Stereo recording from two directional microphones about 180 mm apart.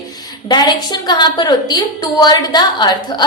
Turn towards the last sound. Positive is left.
turn(degrees=25)  # may be behind; listen again after turning